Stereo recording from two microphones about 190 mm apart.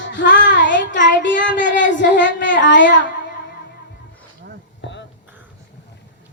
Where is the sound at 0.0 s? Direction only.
75° left (ahead or behind).